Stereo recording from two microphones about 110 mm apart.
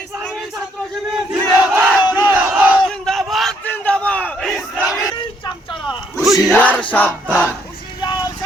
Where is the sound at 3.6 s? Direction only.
15° left (ahead or behind).